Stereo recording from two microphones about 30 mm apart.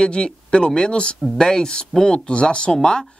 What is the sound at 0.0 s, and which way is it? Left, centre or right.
A man's voice, left.